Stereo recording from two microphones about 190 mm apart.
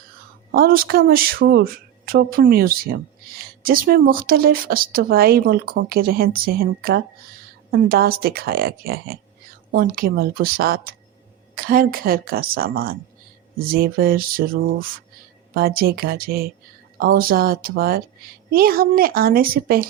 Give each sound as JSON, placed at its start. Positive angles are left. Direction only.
{"t": 0.5, "sound": "a woman's voice", "side_deg": -50}